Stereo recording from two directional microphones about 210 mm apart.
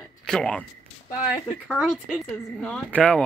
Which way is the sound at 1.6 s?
Centre (ahead or behind).